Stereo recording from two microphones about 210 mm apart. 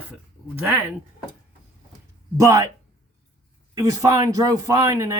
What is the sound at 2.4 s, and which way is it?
Speech, 15° right (ahead or behind).